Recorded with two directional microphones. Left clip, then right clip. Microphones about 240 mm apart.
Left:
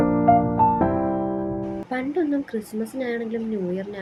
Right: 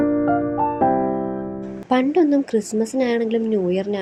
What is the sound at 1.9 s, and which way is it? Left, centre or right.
A woman's voice, right.